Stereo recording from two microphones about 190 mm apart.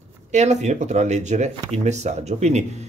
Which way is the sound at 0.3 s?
35° right (ahead or behind).